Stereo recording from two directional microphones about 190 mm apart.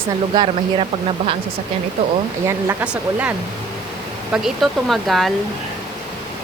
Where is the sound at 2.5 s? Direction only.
10° right (ahead or behind).